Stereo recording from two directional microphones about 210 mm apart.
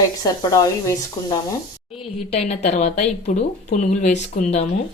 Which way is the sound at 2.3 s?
35° left (ahead or behind).